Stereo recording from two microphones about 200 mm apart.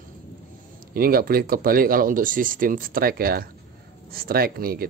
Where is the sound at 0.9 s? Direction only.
50° right (ahead or behind).